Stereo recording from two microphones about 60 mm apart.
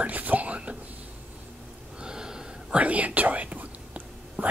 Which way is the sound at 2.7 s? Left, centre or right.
Right.